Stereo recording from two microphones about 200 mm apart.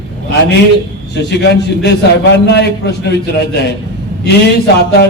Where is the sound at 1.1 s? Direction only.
60° left (ahead or behind).